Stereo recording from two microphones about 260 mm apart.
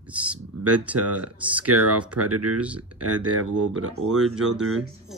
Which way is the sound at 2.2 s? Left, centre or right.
Right.